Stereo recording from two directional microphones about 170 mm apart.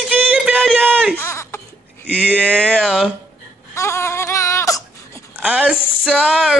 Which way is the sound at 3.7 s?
15° left (ahead or behind).